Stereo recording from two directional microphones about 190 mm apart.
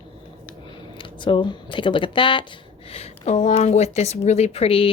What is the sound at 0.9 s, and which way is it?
A woman's voice, 25° left (ahead or behind).